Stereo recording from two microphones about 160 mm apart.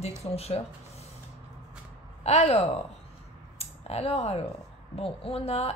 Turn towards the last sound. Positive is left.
turn(degrees=40)  # may be behind; listen again after turning